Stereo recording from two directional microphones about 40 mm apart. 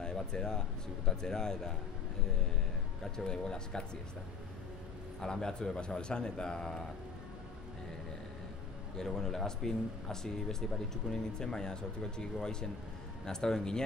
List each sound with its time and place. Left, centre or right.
0.0 s speech: centre
3.3 s a man's voice: centre
5.2 s a man's voice: centre
9.0 s speech: centre